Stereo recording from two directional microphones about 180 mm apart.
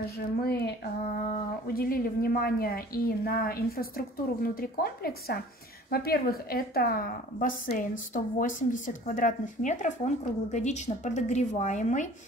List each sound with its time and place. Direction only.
0.4 s a woman's voice: 65° left (ahead or behind); by 12.1 s 45° left (ahead or behind)